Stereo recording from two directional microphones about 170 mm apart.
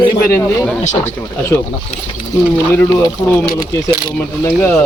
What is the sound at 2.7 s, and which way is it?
Speech, 10° left (ahead or behind).